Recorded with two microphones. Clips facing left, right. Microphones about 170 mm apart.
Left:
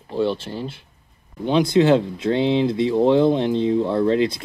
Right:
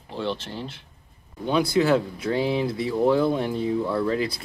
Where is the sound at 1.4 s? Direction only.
25° left (ahead or behind).